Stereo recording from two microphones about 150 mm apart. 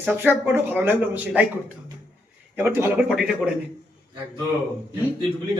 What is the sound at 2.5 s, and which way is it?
Speech, 15° right (ahead or behind).